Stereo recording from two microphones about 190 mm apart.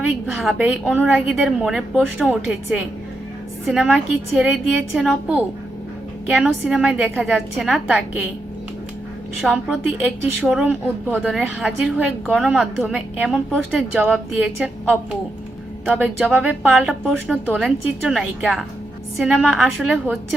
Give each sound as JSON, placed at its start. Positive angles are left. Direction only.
{"t": 0.3, "sound": "a woman's voice", "side_deg": 0}
{"t": 6.3, "sound": "a woman's voice", "side_deg": 0}
{"t": 9.4, "sound": "a woman's voice", "side_deg": -5}